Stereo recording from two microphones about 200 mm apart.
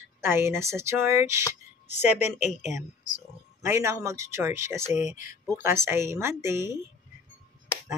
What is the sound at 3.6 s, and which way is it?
Speech, 15° right (ahead or behind).